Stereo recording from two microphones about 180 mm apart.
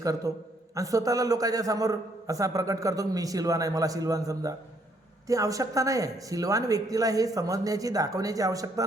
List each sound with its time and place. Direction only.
0.0 s a man's voice: 20° right (ahead or behind)